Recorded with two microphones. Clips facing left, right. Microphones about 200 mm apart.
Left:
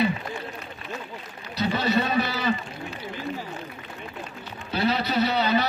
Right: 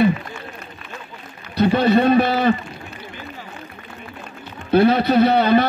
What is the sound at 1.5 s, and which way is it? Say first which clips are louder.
A man's voice: right 9 dB; 55° right (ahead or behind).